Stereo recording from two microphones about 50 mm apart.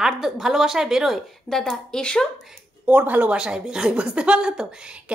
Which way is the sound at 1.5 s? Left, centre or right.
Centre.